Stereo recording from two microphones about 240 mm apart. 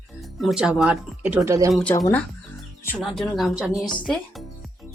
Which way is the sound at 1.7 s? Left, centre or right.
Centre.